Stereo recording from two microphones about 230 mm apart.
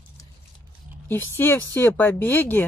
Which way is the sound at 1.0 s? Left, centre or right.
Centre.